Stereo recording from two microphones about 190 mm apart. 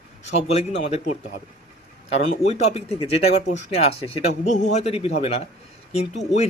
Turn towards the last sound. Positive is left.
turn(degrees=35)  # may be behind; listen again after turning